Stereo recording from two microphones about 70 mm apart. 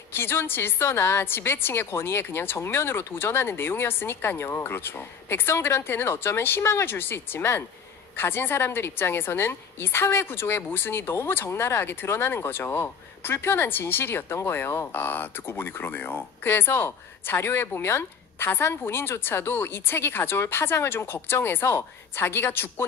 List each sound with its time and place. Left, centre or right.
0.1 s a woman's voice: left